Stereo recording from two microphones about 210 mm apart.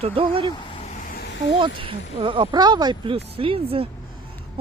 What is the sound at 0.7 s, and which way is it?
Vehicle, 30° left (ahead or behind).